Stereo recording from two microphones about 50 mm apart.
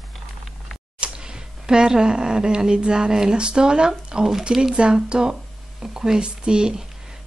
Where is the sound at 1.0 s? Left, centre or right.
Centre.